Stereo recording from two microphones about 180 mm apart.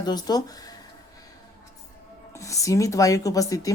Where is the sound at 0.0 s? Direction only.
20° left (ahead or behind).